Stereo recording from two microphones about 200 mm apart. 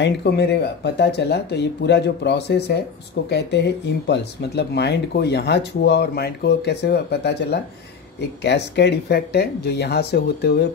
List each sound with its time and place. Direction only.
0.0 s speech: 55° left (ahead or behind)